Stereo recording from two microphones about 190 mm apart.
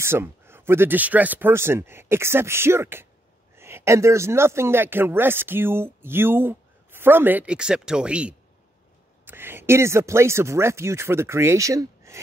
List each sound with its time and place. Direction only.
0.0 s speech: 10° right (ahead or behind)